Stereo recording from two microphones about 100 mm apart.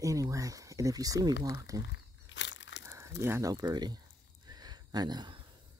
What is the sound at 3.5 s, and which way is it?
Speech, 40° right (ahead or behind).